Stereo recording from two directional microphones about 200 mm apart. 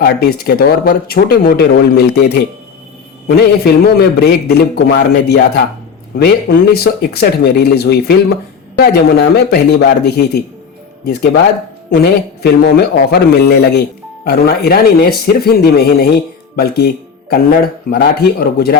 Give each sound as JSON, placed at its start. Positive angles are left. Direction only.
{"t": 0.0, "sound": "a man's voice", "side_deg": 50}